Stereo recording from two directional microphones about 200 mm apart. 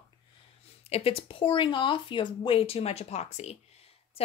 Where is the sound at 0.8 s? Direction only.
30° left (ahead or behind).